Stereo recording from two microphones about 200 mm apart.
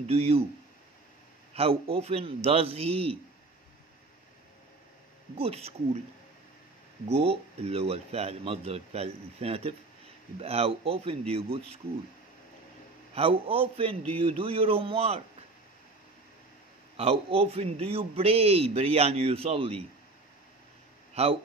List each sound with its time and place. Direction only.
0.0 s speech: 30° right (ahead or behind)
1.5 s a man's voice: 30° right (ahead or behind)
5.4 s speech: 30° right (ahead or behind)
7.1 s a man's voice: 30° right (ahead or behind)
13.1 s a man's voice: 30° right (ahead or behind)
16.9 s a man's voice: 30° right (ahead or behind)
21.1 s a sound: 30° right (ahead or behind)